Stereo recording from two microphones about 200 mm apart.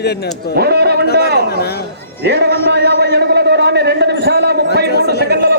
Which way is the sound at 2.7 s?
55° right (ahead or behind).